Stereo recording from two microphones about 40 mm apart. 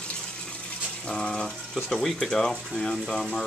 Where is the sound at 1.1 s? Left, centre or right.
Centre.